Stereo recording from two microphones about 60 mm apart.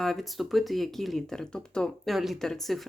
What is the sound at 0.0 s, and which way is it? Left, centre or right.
Speech, centre.